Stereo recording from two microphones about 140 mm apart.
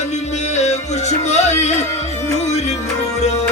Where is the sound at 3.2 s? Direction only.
50° left (ahead or behind).